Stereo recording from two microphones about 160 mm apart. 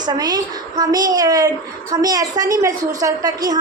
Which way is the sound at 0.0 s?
25° right (ahead or behind).